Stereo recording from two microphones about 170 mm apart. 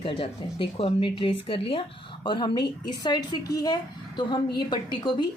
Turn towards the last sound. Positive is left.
turn(degrees=25)  # may be behind; listen again after turning